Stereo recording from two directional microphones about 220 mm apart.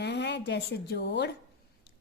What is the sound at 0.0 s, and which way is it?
A woman's voice, 50° left (ahead or behind).